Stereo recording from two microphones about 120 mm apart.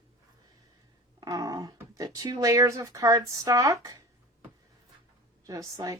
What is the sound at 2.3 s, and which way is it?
Speech, 25° right (ahead or behind).